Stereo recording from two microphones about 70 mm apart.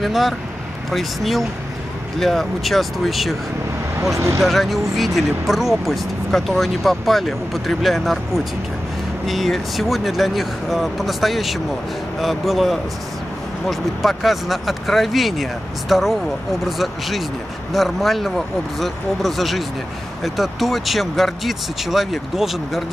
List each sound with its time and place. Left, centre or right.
0.0 s speech: centre
4.1 s speech: right
4.4 s speech: centre